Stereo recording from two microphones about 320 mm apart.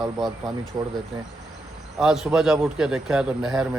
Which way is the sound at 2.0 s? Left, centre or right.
Centre.